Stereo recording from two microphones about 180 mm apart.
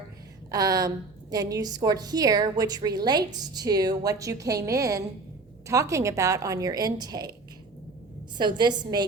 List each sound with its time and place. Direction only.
0.5 s a woman's voice: 20° right (ahead or behind)
8.4 s a woman's voice: 25° right (ahead or behind)